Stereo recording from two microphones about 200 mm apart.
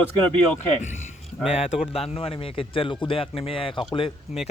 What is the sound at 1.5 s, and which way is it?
A man's voice, 30° left (ahead or behind).